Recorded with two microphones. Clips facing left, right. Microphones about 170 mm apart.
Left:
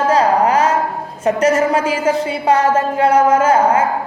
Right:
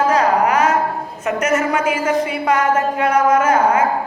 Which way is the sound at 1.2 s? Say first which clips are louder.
Left 4 dB; 30° left (ahead or behind).